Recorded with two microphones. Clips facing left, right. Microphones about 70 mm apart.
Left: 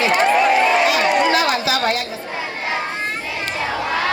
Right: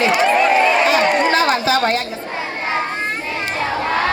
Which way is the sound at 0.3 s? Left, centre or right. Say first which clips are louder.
Even; right.